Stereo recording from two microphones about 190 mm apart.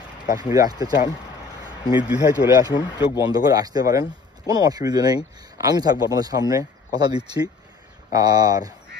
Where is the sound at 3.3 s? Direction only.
20° right (ahead or behind).